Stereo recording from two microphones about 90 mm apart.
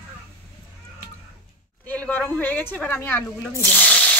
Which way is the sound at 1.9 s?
20° left (ahead or behind).